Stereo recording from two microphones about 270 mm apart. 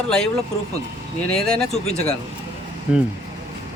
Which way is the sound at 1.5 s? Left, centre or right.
Centre.